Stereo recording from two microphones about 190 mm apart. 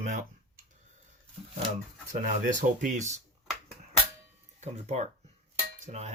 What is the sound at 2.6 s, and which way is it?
Speech, 40° right (ahead or behind).